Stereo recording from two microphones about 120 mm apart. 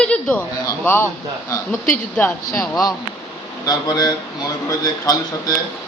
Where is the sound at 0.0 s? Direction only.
10° left (ahead or behind).